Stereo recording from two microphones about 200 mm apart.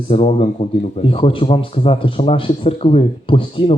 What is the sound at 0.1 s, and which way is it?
A man's voice, 30° left (ahead or behind).